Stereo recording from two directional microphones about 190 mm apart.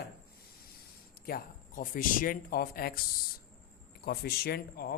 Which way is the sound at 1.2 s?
50° left (ahead or behind).